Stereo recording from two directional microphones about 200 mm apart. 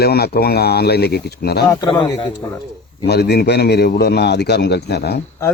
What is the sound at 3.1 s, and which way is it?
A man's voice, 55° left (ahead or behind).